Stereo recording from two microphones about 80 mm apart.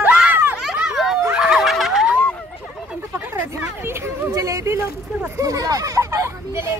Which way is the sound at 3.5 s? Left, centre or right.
Right.